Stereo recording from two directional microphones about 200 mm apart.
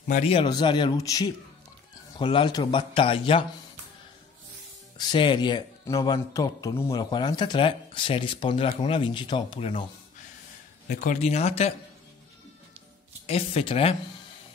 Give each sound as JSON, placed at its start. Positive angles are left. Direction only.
{"t": 0.1, "sound": "speech", "side_deg": 30}
{"t": 4.9, "sound": "speech", "side_deg": 25}
{"t": 10.9, "sound": "speech", "side_deg": 40}
{"t": 13.3, "sound": "speech", "side_deg": 30}